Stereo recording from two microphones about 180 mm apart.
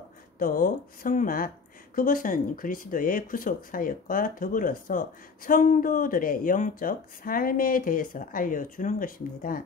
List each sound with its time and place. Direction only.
0.4 s speech: 50° left (ahead or behind)